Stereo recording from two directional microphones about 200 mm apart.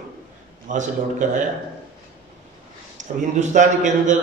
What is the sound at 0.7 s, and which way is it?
Speech, 40° right (ahead or behind).